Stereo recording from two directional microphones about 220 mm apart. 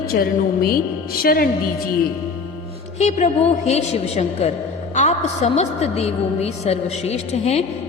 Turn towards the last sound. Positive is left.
turn(degrees=30)  # may be behind; listen again after turning